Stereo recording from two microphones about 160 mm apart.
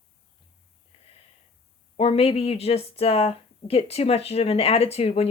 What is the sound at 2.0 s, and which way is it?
Speech, 35° left (ahead or behind).